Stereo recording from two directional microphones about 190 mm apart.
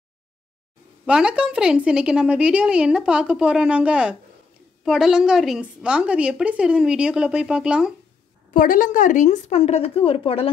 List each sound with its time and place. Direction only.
1.0 s a woman's voice: 5° right (ahead or behind)
8.5 s a woman's voice: 45° left (ahead or behind); by 10.5 s 30° left (ahead or behind)